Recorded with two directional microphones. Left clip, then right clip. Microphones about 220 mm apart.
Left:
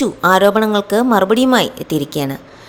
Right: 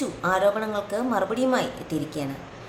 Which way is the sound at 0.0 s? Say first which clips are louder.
Left 11 dB; 40° left (ahead or behind).